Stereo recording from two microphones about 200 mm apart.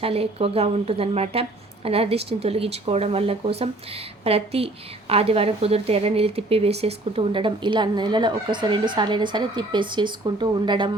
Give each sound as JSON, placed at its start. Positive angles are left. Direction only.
{"t": 0.0, "sound": "a woman's voice", "side_deg": -30}